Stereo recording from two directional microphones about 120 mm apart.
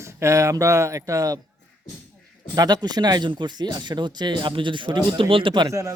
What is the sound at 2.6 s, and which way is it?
Speech, 35° right (ahead or behind).